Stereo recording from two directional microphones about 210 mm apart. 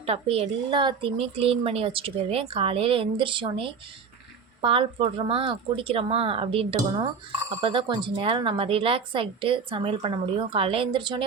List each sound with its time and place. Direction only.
0.0 s speech: 30° right (ahead or behind)